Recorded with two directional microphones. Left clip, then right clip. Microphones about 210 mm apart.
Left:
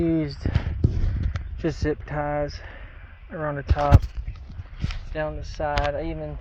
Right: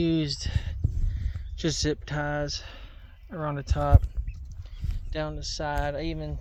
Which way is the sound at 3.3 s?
20° right (ahead or behind).